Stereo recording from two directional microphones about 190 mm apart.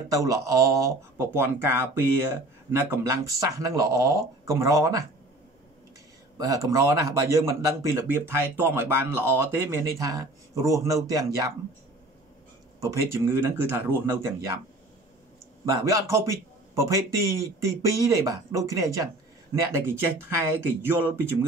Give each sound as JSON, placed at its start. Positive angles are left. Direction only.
{"t": 0.1, "sound": "speech", "side_deg": -15}
{"t": 6.3, "sound": "speech", "side_deg": -20}
{"t": 12.8, "sound": "speech", "side_deg": -15}
{"t": 15.6, "sound": "speech", "side_deg": -15}